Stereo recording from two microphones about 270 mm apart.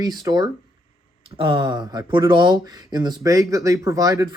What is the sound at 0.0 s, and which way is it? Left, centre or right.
Speech, centre.